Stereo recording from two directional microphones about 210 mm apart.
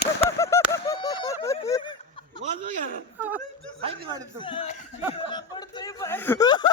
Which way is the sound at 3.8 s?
20° right (ahead or behind).